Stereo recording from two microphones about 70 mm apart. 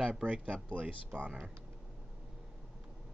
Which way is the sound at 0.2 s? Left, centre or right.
Right.